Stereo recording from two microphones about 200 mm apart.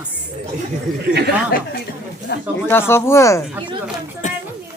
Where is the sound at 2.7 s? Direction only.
10° left (ahead or behind).